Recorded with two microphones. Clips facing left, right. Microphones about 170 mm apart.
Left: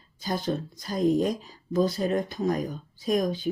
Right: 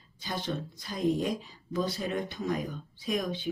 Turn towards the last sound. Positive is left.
turn(degrees=40)  # may be behind; listen again after turning